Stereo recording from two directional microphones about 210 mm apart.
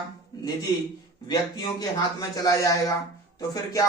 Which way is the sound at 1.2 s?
20° left (ahead or behind).